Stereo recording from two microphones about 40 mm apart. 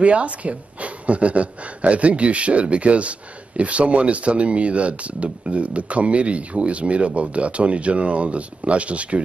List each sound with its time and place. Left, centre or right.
0.0 s speech: right